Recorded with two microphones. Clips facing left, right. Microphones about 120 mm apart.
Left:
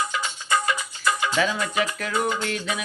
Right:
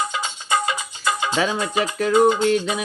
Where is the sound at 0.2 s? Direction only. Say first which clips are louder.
Right 2 dB; 20° right (ahead or behind).